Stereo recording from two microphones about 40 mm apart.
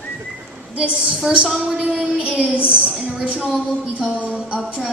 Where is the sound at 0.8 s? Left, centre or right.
Right.